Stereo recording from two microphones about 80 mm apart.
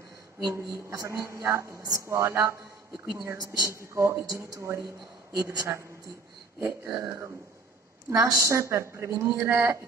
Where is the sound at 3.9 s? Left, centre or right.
Right.